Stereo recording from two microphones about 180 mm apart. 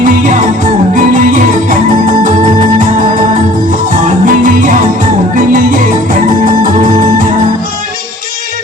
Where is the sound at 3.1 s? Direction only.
45° right (ahead or behind).